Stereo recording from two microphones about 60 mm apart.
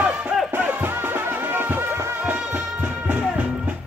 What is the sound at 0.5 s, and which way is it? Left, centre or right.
Music, right.